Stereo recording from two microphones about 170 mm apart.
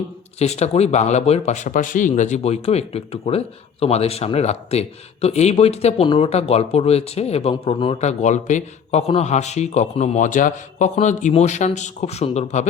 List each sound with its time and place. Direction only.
0.3 s speech: 40° left (ahead or behind)
8.2 s speech: 45° left (ahead or behind)